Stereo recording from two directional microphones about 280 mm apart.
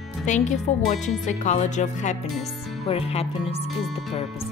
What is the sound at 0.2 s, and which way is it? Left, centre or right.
Speech, left.